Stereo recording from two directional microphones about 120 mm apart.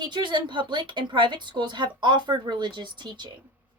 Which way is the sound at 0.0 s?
40° right (ahead or behind).